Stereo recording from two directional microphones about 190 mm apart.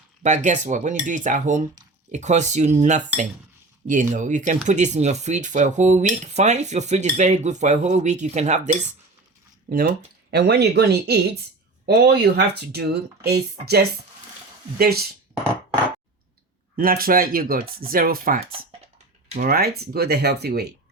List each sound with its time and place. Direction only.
0.2 s speech: 40° right (ahead or behind)
10.3 s speech: 60° right (ahead or behind)
16.7 s speech: 50° right (ahead or behind)